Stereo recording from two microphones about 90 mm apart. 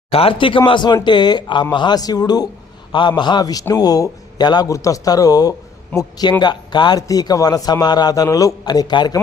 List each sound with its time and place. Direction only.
0.1 s a man's voice: 90° left; by 2.5 s 45° left (ahead or behind)
2.9 s a man's voice: 60° left (ahead or behind); by 6.3 s 45° left (ahead or behind)
6.4 s a man's voice: 55° left (ahead or behind)